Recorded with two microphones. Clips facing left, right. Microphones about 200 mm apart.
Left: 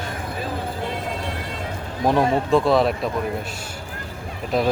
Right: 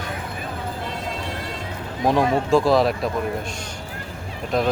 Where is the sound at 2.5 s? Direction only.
Centre (ahead or behind).